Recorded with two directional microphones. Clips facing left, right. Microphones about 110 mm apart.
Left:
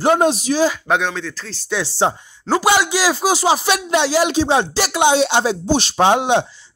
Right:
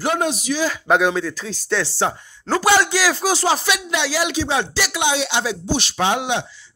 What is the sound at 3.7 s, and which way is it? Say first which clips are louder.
A man's voice: left 5 dB; 35° left (ahead or behind).